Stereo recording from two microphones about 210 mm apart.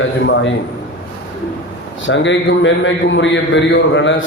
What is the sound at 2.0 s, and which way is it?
A man's voice, 60° left (ahead or behind).